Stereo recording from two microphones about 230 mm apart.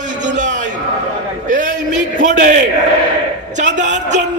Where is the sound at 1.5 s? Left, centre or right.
Right.